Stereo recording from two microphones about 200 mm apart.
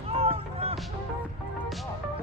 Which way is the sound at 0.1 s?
30° right (ahead or behind).